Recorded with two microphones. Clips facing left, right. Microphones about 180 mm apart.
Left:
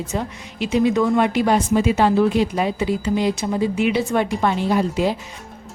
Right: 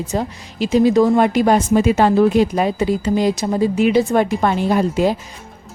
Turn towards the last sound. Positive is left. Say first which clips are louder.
# right 3 dB
turn(degrees=-45)  # may be behind; listen again after turning